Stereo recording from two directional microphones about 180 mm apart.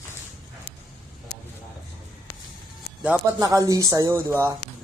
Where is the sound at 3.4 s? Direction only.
20° right (ahead or behind).